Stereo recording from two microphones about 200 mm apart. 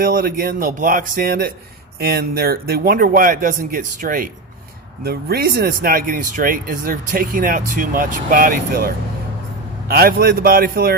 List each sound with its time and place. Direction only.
0.0 s speech: 45° right (ahead or behind)
9.9 s speech: 50° right (ahead or behind)